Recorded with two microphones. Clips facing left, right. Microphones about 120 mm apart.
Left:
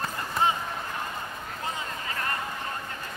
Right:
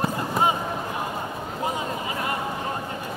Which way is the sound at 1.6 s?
20° right (ahead or behind).